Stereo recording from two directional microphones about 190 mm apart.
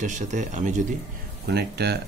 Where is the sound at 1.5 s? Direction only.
60° right (ahead or behind).